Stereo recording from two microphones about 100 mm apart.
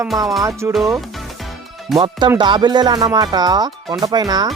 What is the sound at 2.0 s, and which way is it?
Speech, 50° right (ahead or behind).